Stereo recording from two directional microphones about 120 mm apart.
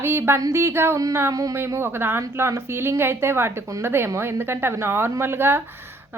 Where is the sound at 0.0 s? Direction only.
20° right (ahead or behind).